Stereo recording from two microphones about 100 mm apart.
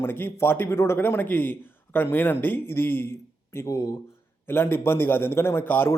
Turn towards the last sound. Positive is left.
turn(degrees=20)  # may be behind; listen again after turning